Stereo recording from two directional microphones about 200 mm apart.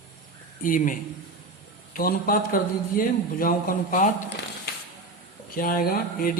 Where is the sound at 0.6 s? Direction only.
40° left (ahead or behind).